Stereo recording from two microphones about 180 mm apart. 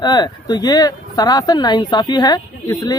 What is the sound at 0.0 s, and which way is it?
Speech, 25° left (ahead or behind).